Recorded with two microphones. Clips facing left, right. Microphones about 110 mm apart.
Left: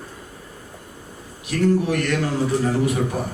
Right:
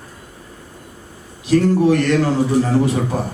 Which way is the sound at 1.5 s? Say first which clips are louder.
Right 6 dB; 30° right (ahead or behind).